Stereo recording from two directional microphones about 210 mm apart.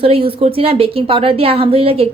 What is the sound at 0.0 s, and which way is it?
Speech, 25° right (ahead or behind).